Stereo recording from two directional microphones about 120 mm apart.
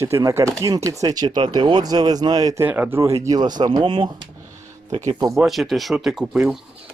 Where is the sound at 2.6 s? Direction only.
15° right (ahead or behind); by 5.4 s 35° right (ahead or behind).